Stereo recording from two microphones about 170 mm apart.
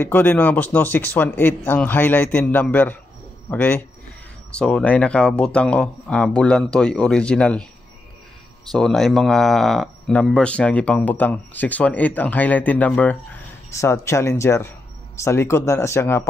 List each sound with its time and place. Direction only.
0.0 s speech: 10° left (ahead or behind)
8.7 s speech: centre (ahead or behind)